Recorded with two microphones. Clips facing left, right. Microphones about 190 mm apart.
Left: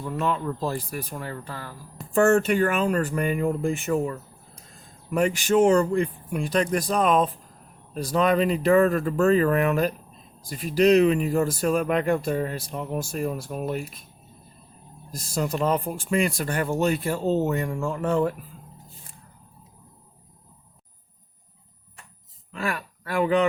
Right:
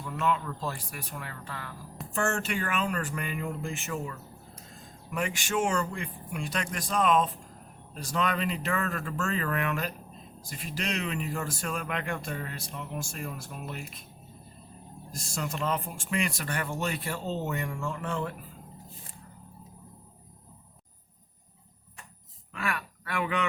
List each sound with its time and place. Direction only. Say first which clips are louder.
0.2 s speech: left 3 dB; 35° left (ahead or behind)
2.0 s a sound: even; centre (ahead or behind)
2.3 s speech: left 11 dB; 40° left (ahead or behind)
15.1 s speech: left 8 dB; 35° left (ahead or behind)
22.5 s speech: left 4 dB; 35° left (ahead or behind)